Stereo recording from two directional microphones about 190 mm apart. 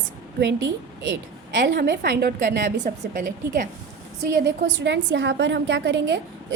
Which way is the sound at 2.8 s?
40° right (ahead or behind).